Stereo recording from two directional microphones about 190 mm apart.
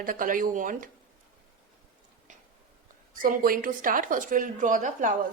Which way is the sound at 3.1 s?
45° right (ahead or behind).